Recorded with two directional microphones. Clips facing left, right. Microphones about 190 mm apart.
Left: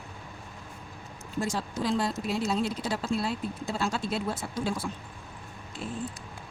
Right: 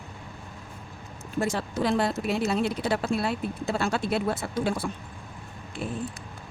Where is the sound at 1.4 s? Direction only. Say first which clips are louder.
Right 4 dB; 60° right (ahead or behind).